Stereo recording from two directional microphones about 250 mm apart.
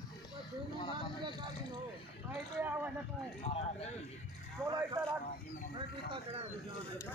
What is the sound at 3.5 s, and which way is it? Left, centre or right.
Speech, left.